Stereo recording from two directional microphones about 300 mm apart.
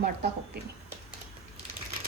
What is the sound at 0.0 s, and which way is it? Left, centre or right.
Speech, right.